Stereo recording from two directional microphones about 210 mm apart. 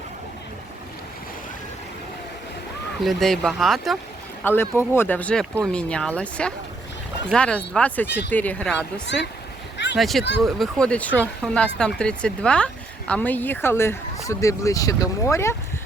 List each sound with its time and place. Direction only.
3.0 s speech: centre (ahead or behind)
9.7 s a sound: 55° left (ahead or behind)
10.0 s speech: centre (ahead or behind)